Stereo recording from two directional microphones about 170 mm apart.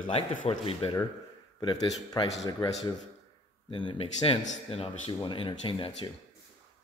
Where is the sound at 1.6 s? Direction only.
25° left (ahead or behind).